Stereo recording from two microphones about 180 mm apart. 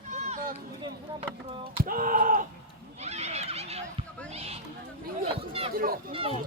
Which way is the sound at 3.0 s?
35° right (ahead or behind).